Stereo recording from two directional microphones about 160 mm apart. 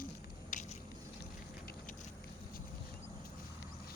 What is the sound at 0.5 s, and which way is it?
Biting, 55° left (ahead or behind).